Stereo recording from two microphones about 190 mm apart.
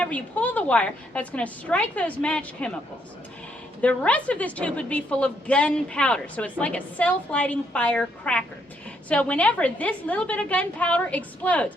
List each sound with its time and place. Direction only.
0.0 s a woman's voice: 5° left (ahead or behind)
3.8 s a woman's voice: 5° left (ahead or behind)